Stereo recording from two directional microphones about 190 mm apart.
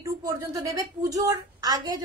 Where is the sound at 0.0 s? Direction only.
15° right (ahead or behind).